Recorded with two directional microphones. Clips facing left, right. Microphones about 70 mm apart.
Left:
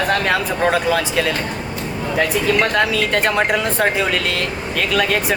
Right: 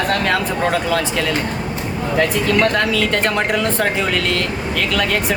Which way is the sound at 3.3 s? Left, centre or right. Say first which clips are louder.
Even; centre.